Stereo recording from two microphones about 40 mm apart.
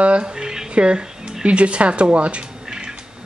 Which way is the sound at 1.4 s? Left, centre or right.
Right.